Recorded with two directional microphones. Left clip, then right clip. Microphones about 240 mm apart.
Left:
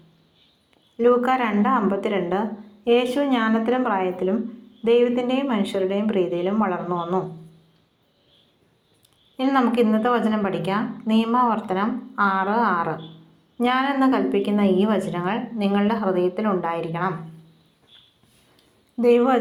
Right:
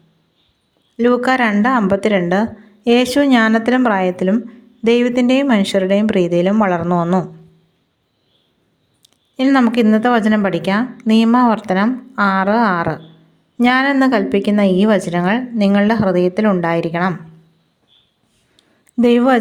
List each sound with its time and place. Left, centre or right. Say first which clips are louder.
0.9 s speech: right 4 dB; right
9.4 s speech: right 6 dB; right
18.9 s speech: right 4 dB; right